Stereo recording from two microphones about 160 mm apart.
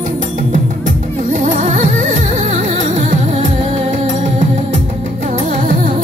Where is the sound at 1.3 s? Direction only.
50° right (ahead or behind).